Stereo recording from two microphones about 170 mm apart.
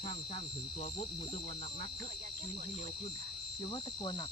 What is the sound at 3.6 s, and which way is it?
Cricket, 30° left (ahead or behind).